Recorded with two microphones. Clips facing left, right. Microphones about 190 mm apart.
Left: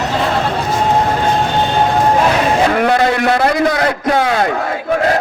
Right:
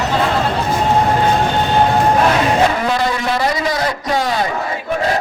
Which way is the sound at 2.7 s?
65° left (ahead or behind).